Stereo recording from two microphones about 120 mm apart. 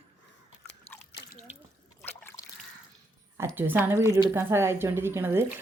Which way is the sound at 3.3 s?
20° right (ahead or behind).